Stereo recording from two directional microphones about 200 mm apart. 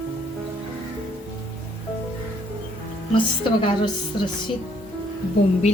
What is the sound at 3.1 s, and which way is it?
Speech, 25° left (ahead or behind).